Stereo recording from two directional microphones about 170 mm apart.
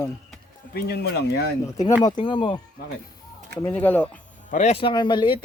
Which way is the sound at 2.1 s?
25° left (ahead or behind).